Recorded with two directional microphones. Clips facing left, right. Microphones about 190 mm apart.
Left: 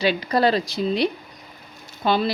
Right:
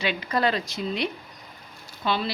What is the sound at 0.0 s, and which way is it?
Speech, 35° left (ahead or behind).